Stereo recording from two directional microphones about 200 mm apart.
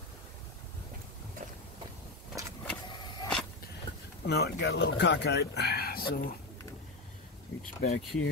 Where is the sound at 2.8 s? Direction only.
25° left (ahead or behind).